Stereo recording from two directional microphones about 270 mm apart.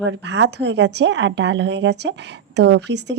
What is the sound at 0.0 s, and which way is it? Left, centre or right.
Speech, right.